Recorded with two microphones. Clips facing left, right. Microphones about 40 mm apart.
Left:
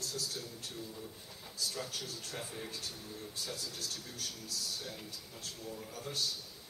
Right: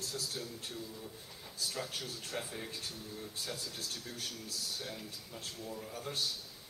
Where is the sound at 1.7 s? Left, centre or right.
Centre.